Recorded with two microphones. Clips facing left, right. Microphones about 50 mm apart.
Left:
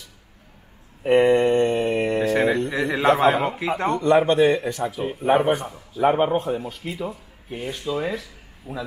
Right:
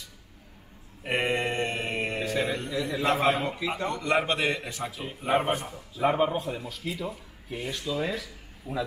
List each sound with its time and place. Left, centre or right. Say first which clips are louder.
1.0 s mantra: left 11 dB; left
2.2 s a man's voice: left 9 dB; left
3.9 s a man's voice: left 10 dB; left
5.2 s speech: left 7 dB; left
6.1 s speech: left 6 dB; left
8.6 s speech: even; left